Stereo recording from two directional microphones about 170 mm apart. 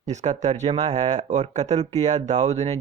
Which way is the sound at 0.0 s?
45° right (ahead or behind).